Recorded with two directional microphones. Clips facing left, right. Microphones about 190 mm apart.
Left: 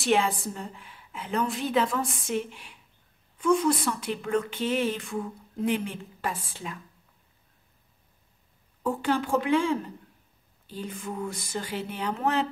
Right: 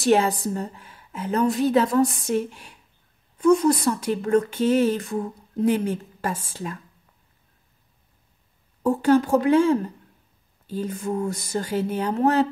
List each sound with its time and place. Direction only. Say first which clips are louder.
0.0 s a woman's voice: right 5 dB; 40° right (ahead or behind)
8.8 s a woman's voice: right 8 dB; 40° right (ahead or behind)